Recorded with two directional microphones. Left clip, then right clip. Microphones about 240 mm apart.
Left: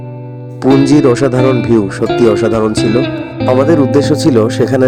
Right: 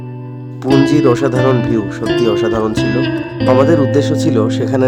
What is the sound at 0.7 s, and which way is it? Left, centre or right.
Speech, left.